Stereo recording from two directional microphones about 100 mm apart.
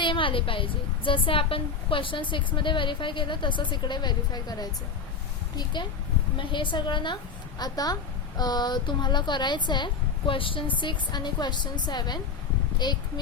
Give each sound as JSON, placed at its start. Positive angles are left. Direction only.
{"t": 0.0, "sound": "a woman's voice", "side_deg": 55}
{"t": 6.3, "sound": "speech", "side_deg": 55}
{"t": 7.6, "sound": "a woman's voice", "side_deg": 40}